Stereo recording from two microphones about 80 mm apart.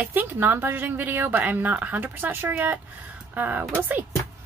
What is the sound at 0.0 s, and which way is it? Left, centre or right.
A woman's voice, right.